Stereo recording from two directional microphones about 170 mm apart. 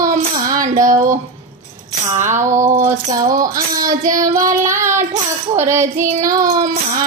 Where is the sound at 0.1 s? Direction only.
55° right (ahead or behind).